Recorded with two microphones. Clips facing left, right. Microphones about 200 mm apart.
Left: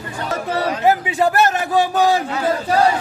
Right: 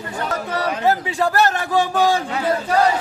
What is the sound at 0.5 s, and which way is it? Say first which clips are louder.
A man's voice: left 3 dB; 20° left (ahead or behind).